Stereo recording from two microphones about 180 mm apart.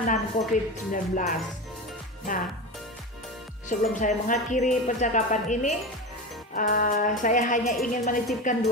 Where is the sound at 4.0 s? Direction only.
45° left (ahead or behind).